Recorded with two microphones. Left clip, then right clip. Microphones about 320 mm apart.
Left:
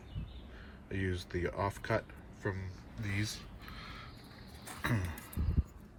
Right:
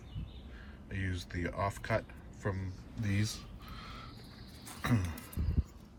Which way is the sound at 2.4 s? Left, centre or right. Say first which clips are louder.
Even; centre.